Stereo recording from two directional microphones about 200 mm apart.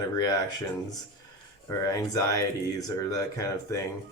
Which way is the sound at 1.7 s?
15° left (ahead or behind).